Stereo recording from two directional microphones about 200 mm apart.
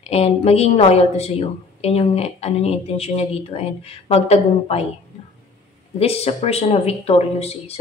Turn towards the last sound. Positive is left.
turn(degrees=30)  # may be behind; listen again after turning